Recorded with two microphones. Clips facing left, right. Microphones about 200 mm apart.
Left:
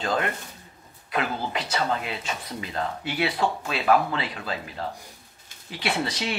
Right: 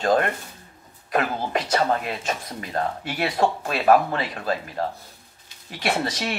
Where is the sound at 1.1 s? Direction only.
45° right (ahead or behind).